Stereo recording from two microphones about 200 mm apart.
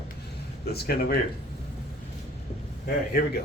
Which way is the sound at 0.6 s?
50° left (ahead or behind).